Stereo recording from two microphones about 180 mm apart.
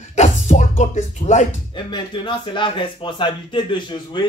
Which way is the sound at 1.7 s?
25° left (ahead or behind).